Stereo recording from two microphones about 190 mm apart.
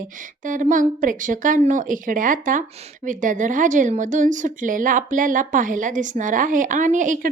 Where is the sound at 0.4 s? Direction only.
45° right (ahead or behind).